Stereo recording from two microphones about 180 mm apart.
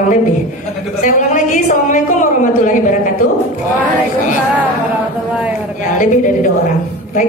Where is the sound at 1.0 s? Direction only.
45° left (ahead or behind).